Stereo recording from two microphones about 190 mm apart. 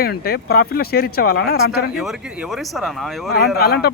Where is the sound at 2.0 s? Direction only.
Centre (ahead or behind).